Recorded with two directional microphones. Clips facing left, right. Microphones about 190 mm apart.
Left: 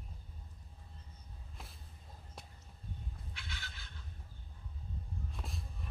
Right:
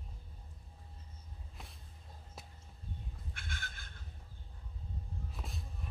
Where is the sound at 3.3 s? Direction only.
50° right (ahead or behind).